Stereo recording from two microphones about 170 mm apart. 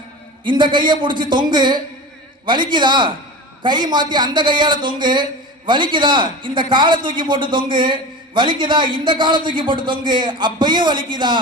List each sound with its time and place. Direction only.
0.4 s a man's voice: 30° right (ahead or behind)